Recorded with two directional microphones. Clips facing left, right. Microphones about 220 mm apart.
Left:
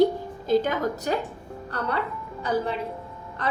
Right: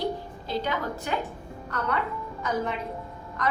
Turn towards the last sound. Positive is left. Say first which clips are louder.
# even
turn(degrees=30)  # may be behind; listen again after turning